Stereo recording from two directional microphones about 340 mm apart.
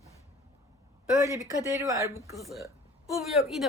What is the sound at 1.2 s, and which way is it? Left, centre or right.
Speech, centre.